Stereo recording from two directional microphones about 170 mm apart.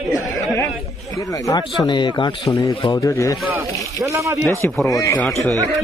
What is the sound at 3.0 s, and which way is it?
Speech, 20° left (ahead or behind).